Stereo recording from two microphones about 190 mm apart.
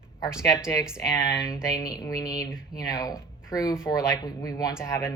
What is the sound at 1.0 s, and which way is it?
Speech, 15° left (ahead or behind).